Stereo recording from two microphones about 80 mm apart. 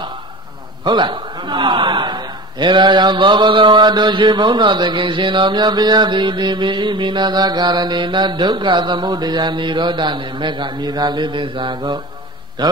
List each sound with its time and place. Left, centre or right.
0.8 s a man's voice: right